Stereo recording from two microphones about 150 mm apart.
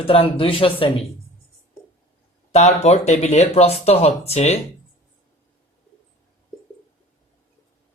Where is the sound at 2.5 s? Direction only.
45° left (ahead or behind).